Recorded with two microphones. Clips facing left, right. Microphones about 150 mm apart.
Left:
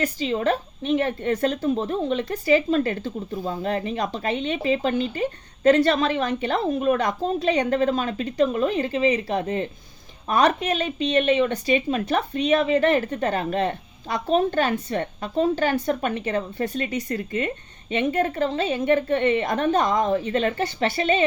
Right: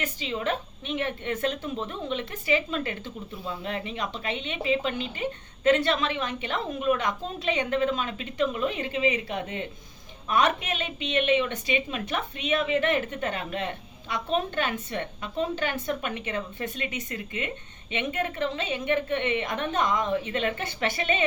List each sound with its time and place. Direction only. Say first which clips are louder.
0.0 s a woman's voice: left 7 dB; 40° left (ahead or behind)